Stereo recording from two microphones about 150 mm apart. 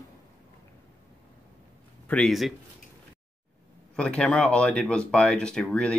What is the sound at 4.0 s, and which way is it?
Speech, 5° left (ahead or behind).